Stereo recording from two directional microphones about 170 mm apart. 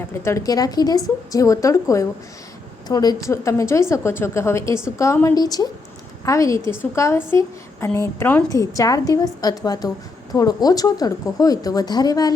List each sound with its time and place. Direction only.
0.3 s a woman's voice: 20° left (ahead or behind)